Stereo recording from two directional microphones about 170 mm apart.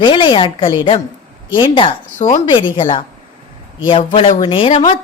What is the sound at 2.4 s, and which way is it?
Speech, 30° left (ahead or behind).